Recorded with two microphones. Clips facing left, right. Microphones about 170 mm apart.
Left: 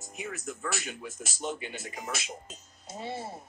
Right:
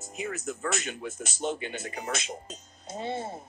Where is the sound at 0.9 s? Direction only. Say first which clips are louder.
Right 4 dB; 35° right (ahead or behind).